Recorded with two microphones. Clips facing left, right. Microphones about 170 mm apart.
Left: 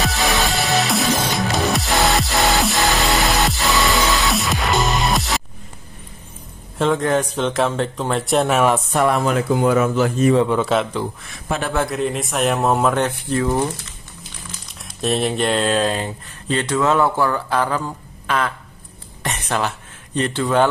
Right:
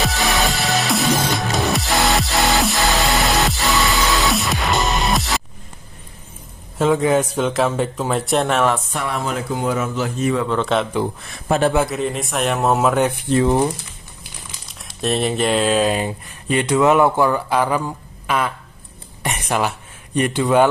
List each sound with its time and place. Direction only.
0.0 s music: centre (ahead or behind)
6.8 s a man's voice: 5° right (ahead or behind); by 8.8 s 10° left (ahead or behind)
9.7 s speech: 65° left (ahead or behind)
10.5 s a man's voice: 5° left (ahead or behind)
11.4 s a man's voice: 35° right (ahead or behind)
11.8 s a man's voice: centre (ahead or behind); by 13.7 s 20° right (ahead or behind)
14.9 s speech: centre (ahead or behind)